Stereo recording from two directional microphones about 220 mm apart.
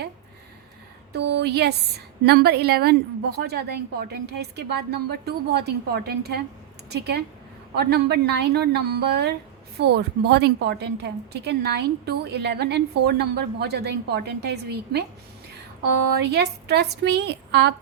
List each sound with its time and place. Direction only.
1.1 s a woman's voice: 50° right (ahead or behind)
16.3 s a woman's voice: 50° right (ahead or behind)